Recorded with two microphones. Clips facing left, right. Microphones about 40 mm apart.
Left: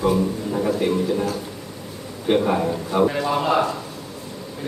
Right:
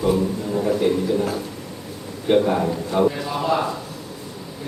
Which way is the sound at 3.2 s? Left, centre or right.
Left.